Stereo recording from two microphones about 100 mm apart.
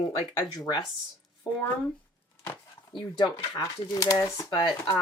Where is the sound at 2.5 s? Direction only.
50° left (ahead or behind).